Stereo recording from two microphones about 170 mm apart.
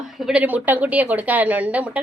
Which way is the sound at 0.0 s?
Centre (ahead or behind).